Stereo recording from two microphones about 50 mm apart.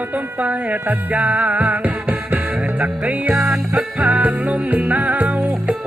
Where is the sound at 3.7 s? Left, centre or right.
Right.